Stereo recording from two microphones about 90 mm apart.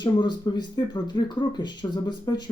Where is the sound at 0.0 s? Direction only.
55° left (ahead or behind).